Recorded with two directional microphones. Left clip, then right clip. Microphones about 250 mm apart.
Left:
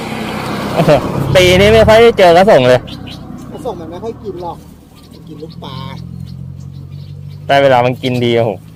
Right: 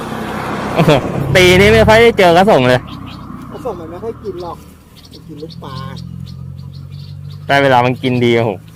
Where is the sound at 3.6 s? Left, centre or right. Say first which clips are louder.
Left 1 dB; centre.